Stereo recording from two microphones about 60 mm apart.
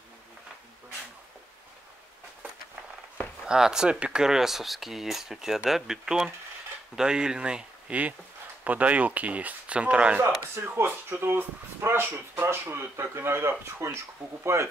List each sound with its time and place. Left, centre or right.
3.4 s speech: centre
10.2 s speech: right